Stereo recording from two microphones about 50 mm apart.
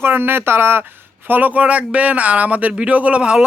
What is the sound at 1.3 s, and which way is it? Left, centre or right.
Speech, right.